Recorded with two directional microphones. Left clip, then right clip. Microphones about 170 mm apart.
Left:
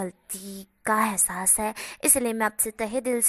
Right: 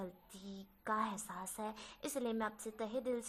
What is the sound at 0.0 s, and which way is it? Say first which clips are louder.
A woman's voice: left 14 dB; 40° left (ahead or behind).